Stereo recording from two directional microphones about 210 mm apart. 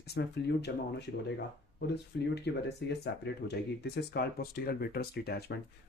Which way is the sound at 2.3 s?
55° left (ahead or behind).